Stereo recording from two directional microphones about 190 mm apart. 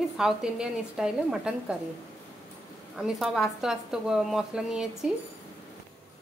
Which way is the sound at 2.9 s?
Centre (ahead or behind).